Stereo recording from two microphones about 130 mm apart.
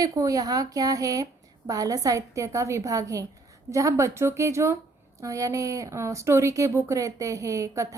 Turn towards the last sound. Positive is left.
turn(degrees=-25)  # may be behind; listen again after turning